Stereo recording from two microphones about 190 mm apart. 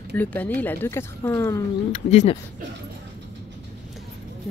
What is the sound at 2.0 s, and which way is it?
Speech, 35° left (ahead or behind).